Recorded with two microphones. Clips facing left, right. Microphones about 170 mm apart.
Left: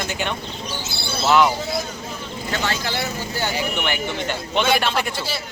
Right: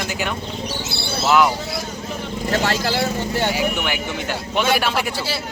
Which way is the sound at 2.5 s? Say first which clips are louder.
Right 4 dB; 40° right (ahead or behind).